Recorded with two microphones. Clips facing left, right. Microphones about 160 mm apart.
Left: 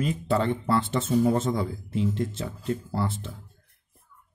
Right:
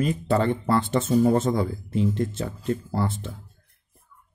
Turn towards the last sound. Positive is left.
turn(degrees=-50)  # may be behind; listen again after turning